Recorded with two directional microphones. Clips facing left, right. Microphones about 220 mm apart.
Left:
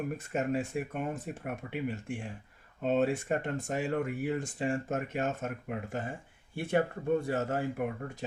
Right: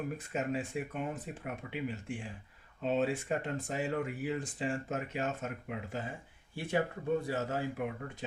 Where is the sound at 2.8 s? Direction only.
50° left (ahead or behind).